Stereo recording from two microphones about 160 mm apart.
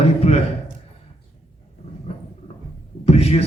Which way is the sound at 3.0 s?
40° left (ahead or behind).